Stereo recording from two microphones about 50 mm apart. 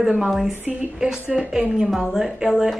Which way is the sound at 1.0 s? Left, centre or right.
Centre.